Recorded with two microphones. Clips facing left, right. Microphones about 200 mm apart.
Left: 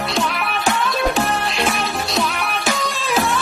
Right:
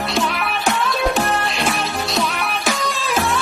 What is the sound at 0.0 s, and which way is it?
Music, centre (ahead or behind).